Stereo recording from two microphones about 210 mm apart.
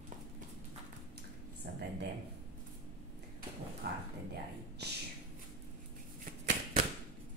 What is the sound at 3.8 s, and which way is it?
Dog, 50° right (ahead or behind).